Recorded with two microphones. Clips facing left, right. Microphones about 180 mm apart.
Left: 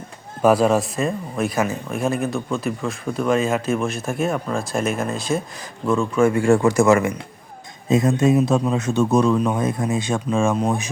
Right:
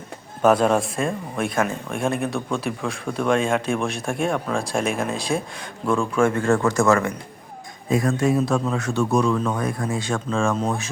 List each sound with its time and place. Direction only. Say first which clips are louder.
0.4 s a man's voice: left 1 dB; 5° left (ahead or behind)